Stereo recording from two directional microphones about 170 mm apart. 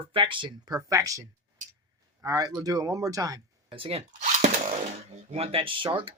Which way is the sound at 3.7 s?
35° right (ahead or behind).